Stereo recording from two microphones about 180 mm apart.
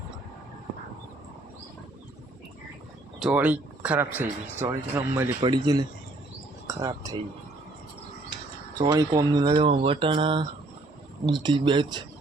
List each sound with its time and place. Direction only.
3.2 s speech: 5° right (ahead or behind)
8.8 s speech: 20° right (ahead or behind)